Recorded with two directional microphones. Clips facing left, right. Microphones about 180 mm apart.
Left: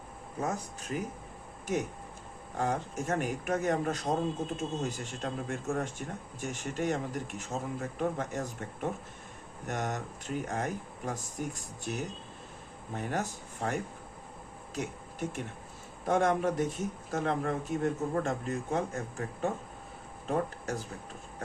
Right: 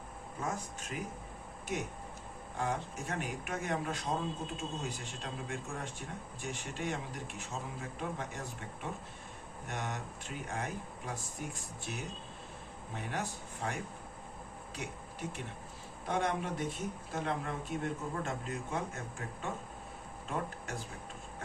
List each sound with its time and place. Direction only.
0.4 s speech: 40° left (ahead or behind)
2.6 s speech: 45° left (ahead or behind)
14.8 s speech: 45° left (ahead or behind)
20.3 s speech: 45° left (ahead or behind)